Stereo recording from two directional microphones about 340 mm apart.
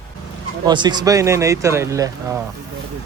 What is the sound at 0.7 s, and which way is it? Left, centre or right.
Speech, centre.